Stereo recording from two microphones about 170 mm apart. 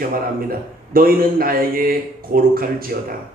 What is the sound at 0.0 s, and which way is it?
A man's voice, 60° right (ahead or behind).